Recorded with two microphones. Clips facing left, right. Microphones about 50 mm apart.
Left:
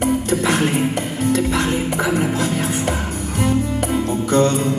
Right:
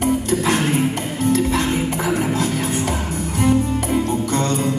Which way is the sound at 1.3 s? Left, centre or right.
Left.